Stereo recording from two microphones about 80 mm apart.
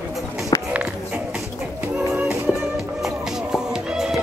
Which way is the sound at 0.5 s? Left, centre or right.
Left.